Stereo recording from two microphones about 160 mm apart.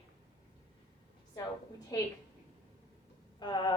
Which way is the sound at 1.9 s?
20° left (ahead or behind).